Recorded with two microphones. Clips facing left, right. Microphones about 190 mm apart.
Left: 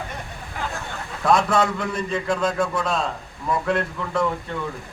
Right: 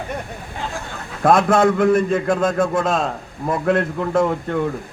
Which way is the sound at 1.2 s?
50° right (ahead or behind).